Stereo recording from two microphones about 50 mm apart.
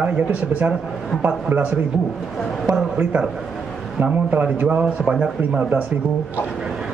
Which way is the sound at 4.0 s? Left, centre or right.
Right.